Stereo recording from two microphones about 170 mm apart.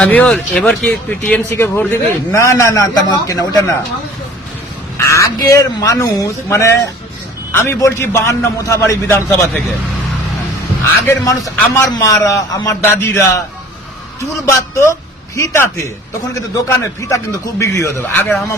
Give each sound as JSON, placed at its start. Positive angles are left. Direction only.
{"t": 0.0, "sound": "speech", "side_deg": 10}
{"t": 4.9, "sound": "speech", "side_deg": 20}
{"t": 11.0, "sound": "a man's voice", "side_deg": 20}
{"t": 14.4, "sound": "speech", "side_deg": 15}